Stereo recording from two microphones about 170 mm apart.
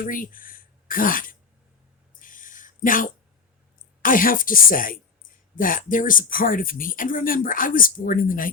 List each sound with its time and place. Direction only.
0.0 s speech: 55° left (ahead or behind)
2.1 s a sound: 50° left (ahead or behind)
4.0 s a woman's voice: 55° left (ahead or behind)